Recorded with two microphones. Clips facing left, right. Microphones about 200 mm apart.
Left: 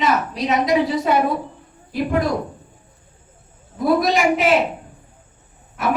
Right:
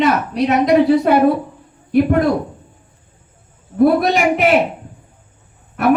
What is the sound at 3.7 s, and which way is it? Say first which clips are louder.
Speech: right 5 dB; 60° right (ahead or behind).